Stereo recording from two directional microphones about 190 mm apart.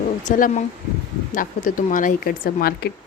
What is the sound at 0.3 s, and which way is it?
Speech, 45° left (ahead or behind).